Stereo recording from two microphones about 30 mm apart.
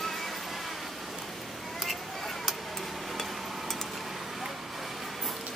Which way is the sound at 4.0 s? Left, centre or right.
Centre.